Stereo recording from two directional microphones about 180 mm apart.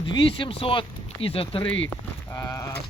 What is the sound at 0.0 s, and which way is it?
Speech, 25° left (ahead or behind).